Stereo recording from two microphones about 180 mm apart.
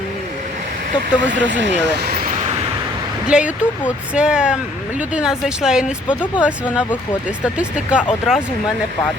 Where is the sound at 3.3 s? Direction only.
5° right (ahead or behind).